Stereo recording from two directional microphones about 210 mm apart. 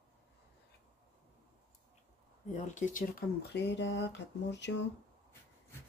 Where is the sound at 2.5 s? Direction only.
35° left (ahead or behind); by 4.8 s 55° left (ahead or behind).